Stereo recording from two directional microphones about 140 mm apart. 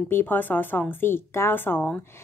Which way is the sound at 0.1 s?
15° left (ahead or behind).